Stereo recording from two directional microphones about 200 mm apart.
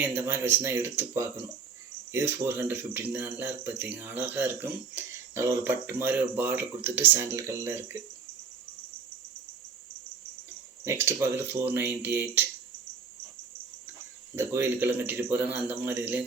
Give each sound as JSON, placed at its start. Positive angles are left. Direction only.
{"t": 0.0, "sound": "speech", "side_deg": -10}
{"t": 10.8, "sound": "speech", "side_deg": -15}
{"t": 14.3, "sound": "speech", "side_deg": -10}